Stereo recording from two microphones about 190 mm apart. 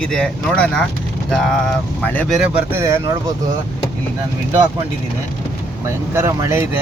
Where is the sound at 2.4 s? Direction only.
10° right (ahead or behind).